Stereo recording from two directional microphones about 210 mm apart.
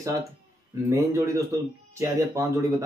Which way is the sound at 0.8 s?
15° right (ahead or behind).